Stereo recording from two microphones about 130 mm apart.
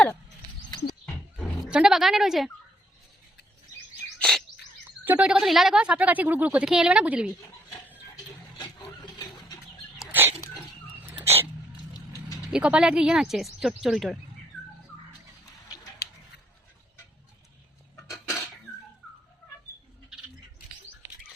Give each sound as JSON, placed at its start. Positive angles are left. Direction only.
{"t": 1.6, "sound": "speech", "side_deg": -5}
{"t": 4.2, "sound": "bird", "side_deg": 0}
{"t": 5.0, "sound": "a woman's voice", "side_deg": -10}
{"t": 10.1, "sound": "dog", "side_deg": -15}
{"t": 11.1, "sound": "hiccup", "side_deg": -15}
{"t": 12.5, "sound": "speech", "side_deg": -5}